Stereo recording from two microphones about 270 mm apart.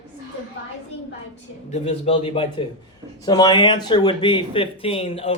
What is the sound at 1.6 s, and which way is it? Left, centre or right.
Speech, left.